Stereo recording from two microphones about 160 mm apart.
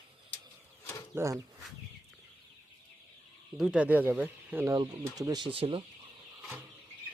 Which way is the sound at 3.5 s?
5° right (ahead or behind).